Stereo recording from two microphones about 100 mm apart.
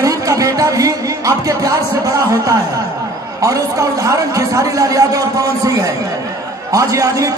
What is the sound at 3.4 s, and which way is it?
A man's voice, 35° right (ahead or behind).